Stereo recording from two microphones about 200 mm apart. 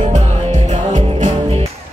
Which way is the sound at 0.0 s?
35° right (ahead or behind).